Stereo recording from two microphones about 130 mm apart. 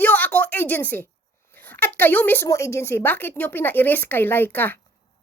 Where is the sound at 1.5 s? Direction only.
15° left (ahead or behind).